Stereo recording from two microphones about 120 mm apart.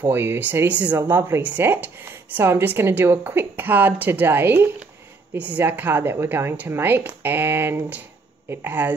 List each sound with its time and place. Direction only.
0.0 s speech: 20° right (ahead or behind)